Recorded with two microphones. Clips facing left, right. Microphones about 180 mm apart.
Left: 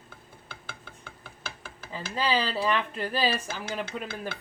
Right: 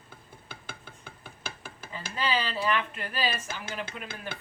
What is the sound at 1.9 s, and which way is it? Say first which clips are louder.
Speech: left 3 dB; 35° left (ahead or behind).